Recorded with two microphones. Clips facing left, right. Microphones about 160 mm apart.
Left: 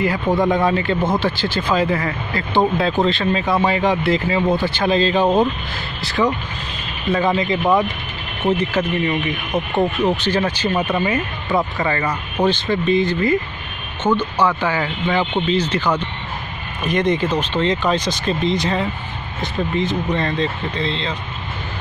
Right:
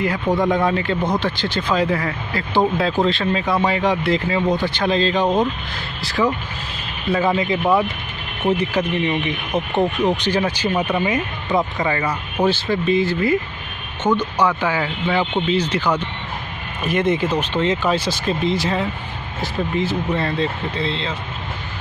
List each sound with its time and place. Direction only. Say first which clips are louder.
0.0 s speech: left 1 dB; centre (ahead or behind)